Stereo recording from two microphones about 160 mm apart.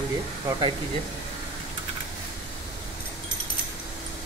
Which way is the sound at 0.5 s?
30° right (ahead or behind).